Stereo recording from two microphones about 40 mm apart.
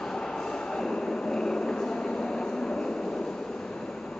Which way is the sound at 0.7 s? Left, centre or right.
Centre.